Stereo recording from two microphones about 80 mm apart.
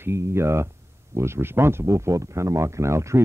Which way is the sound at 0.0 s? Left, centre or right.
Right.